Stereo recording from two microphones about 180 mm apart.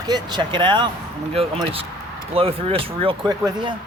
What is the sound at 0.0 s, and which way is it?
Speech, 25° right (ahead or behind).